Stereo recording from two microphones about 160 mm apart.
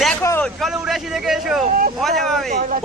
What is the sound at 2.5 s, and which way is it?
Speech, 70° right (ahead or behind).